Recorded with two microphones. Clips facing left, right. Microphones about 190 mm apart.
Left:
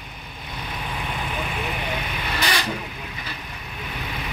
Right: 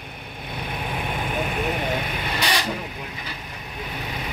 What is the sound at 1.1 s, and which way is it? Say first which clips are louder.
Vehicle: right 4 dB; 45° right (ahead or behind).